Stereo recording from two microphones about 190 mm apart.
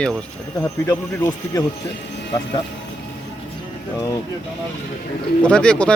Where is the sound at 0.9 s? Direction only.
20° left (ahead or behind).